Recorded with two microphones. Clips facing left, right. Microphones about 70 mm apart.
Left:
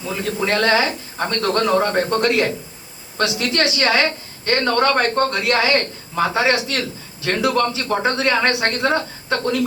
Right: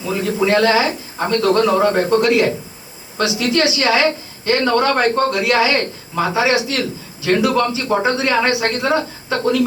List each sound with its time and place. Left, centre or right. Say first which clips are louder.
0.0 s speech: right 4 dB; right
0.4 s a man's voice: right 3 dB; left